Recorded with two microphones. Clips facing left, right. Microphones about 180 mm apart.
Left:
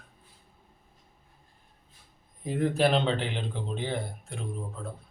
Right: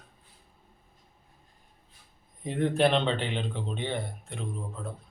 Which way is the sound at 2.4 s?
Centre (ahead or behind).